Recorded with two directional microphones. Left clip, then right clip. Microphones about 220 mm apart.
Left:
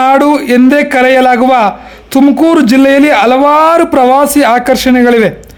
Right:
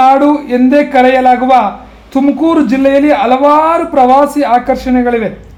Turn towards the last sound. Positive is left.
turn(degrees=40)  # may be behind; listen again after turning